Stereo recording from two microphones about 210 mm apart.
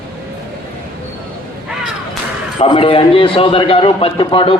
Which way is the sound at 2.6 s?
25° left (ahead or behind).